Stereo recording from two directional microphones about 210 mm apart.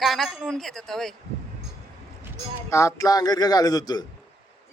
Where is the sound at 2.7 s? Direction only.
15° left (ahead or behind).